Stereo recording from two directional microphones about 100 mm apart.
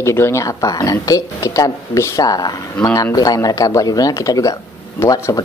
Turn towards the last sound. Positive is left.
turn(degrees=35)  # may be behind; listen again after turning